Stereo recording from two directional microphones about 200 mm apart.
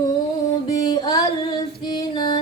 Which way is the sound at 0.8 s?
20° left (ahead or behind).